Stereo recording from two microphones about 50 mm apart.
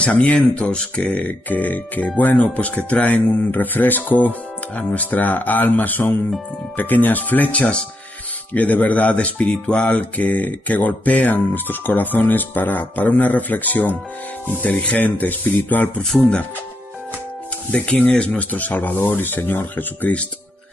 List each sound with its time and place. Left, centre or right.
0.1 s speech: left
0.6 s speech: centre; by 16.0 s left
17.6 s speech: left
18.3 s speech: left